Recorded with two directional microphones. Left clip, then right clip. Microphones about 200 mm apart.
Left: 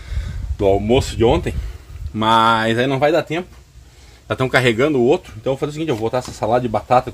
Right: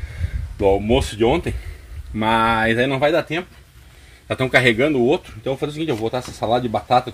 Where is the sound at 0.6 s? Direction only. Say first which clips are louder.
Left 1 dB; 10° left (ahead or behind).